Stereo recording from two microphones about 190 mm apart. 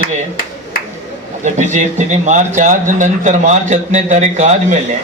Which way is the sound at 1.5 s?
40° right (ahead or behind).